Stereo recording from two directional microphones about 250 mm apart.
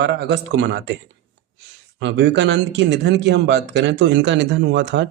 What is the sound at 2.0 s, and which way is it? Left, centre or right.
Speech, right.